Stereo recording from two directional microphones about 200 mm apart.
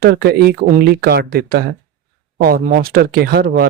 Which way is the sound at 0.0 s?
55° right (ahead or behind).